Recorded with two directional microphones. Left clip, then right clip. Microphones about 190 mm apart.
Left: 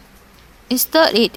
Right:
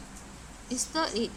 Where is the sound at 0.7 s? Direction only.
45° left (ahead or behind).